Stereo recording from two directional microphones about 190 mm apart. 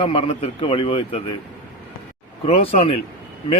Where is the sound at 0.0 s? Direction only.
30° left (ahead or behind).